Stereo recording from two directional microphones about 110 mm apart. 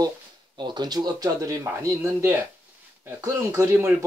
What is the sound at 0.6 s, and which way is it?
A man's voice, 40° right (ahead or behind).